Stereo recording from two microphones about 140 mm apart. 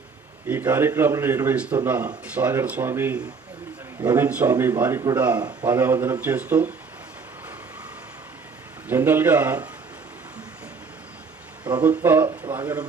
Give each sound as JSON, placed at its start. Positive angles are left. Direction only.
{"t": 0.4, "sound": "speech", "side_deg": -15}
{"t": 4.3, "sound": "speech", "side_deg": -10}
{"t": 8.9, "sound": "speech", "side_deg": -15}
{"t": 11.8, "sound": "speech", "side_deg": -15}